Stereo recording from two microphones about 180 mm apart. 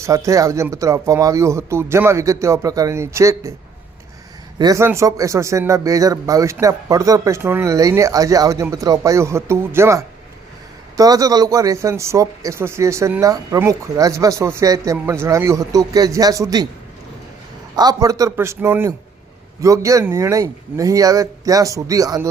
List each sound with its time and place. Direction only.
0.0 s a man's voice: 15° right (ahead or behind)
4.5 s a man's voice: 20° right (ahead or behind)
17.7 s a man's voice: 20° right (ahead or behind)